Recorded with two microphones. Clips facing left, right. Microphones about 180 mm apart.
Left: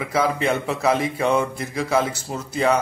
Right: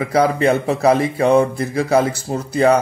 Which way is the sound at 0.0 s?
40° right (ahead or behind).